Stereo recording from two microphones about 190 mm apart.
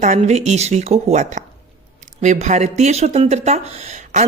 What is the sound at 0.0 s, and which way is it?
Speech, 35° right (ahead or behind).